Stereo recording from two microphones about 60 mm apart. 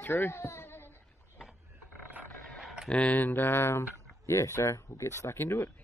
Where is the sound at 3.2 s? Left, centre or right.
Left.